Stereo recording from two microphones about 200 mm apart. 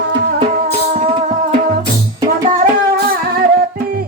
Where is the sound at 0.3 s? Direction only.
30° right (ahead or behind).